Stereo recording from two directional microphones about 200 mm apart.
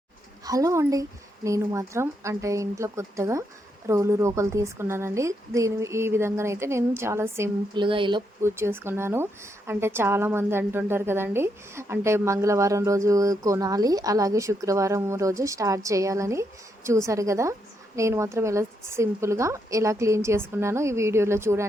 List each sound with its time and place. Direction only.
0.4 s a woman's voice: 15° right (ahead or behind)
8.4 s a woman's voice: 15° right (ahead or behind)